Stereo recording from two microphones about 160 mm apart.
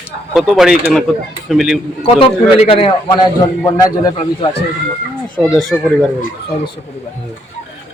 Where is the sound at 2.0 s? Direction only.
35° left (ahead or behind).